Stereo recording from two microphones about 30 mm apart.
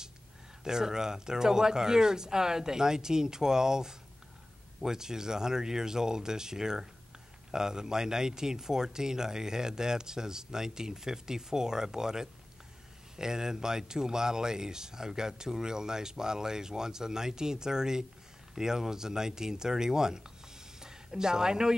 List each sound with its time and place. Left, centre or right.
0.7 s speech: centre